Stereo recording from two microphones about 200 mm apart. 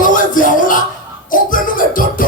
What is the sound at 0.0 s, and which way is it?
Music, 40° left (ahead or behind).